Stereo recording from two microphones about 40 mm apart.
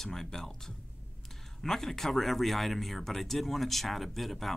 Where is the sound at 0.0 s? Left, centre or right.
Centre.